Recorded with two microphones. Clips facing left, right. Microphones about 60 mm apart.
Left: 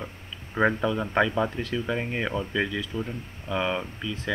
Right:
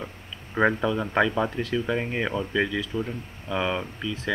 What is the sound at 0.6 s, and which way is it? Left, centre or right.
Speech, centre.